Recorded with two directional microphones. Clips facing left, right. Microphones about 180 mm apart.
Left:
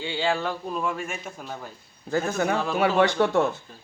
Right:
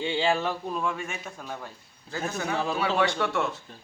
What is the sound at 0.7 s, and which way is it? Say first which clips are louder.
Speech: left 2 dB; 5° left (ahead or behind).